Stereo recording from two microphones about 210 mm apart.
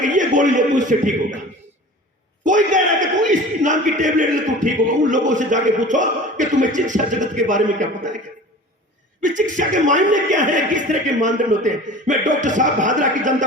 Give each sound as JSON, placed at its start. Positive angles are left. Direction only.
{"t": 0.0, "sound": "a man's voice", "side_deg": -35}
{"t": 2.4, "sound": "speech", "side_deg": -35}
{"t": 9.2, "sound": "speech", "side_deg": -35}